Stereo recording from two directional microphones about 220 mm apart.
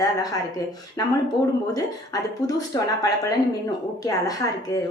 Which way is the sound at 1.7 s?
15° left (ahead or behind).